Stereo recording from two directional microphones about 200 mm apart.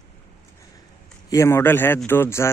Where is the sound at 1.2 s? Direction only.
15° left (ahead or behind).